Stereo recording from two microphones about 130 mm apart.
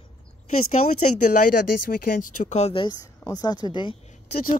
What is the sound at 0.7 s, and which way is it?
Speech, 70° left (ahead or behind).